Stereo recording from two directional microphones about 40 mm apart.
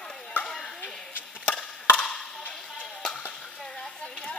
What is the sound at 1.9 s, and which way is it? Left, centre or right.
Chop, left.